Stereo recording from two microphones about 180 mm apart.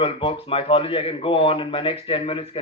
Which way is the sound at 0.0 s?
30° left (ahead or behind).